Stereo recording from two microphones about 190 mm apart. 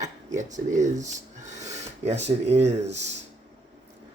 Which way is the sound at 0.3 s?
40° right (ahead or behind).